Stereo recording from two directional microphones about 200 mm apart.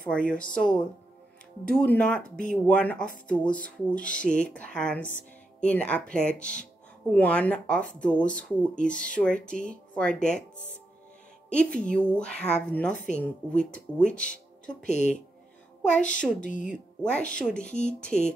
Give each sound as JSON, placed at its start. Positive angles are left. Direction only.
{"t": 0.0, "sound": "speech", "side_deg": 5}
{"t": 1.7, "sound": "speech", "side_deg": 5}
{"t": 11.5, "sound": "speech", "side_deg": 5}
{"t": 14.8, "sound": "speech", "side_deg": 35}
{"t": 17.1, "sound": "speech", "side_deg": 5}